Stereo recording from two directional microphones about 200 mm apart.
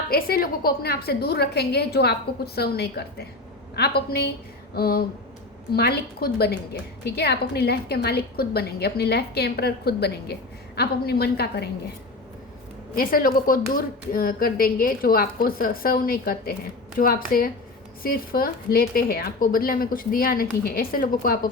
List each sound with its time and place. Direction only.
0.1 s a woman's voice: 50° left (ahead or behind)
13.0 s a woman's voice: 45° left (ahead or behind)